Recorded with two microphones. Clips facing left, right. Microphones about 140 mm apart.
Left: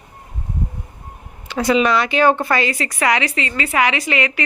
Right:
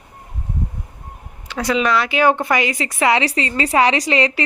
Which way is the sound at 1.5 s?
Centre (ahead or behind).